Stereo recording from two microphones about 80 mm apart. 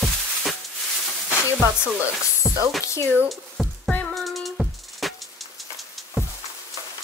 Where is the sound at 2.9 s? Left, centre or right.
Left.